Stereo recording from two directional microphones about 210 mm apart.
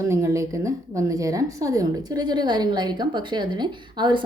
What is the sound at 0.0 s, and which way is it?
A woman's voice, 15° right (ahead or behind).